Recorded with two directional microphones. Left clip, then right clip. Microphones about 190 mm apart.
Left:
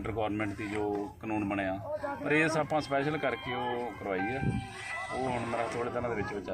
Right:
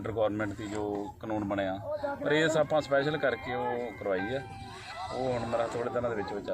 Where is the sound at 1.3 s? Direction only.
5° left (ahead or behind).